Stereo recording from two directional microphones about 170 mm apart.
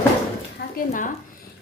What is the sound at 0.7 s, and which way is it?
Speech, 50° left (ahead or behind).